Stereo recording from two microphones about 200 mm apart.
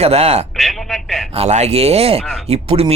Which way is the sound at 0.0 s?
30° right (ahead or behind).